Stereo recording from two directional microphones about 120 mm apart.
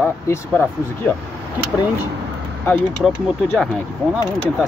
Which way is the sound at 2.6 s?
15° left (ahead or behind).